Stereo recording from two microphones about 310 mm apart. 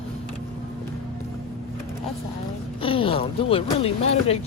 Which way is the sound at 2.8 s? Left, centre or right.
Centre.